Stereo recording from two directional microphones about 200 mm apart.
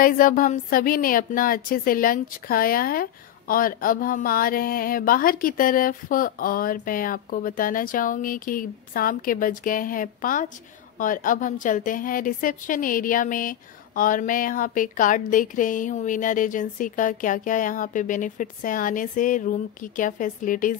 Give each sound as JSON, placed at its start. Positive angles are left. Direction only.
{"t": 0.0, "sound": "a woman's voice", "side_deg": 40}